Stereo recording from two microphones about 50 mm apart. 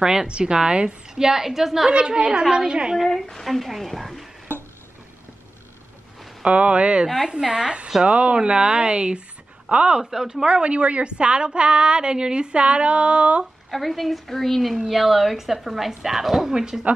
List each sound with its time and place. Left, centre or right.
0.0 s a woman's voice: centre
1.9 s a woman's voice: centre
3.0 s a woman's voice: centre
6.4 s a woman's voice: right
13.7 s a woman's voice: centre